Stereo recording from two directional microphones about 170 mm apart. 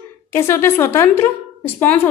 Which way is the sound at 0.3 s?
15° left (ahead or behind).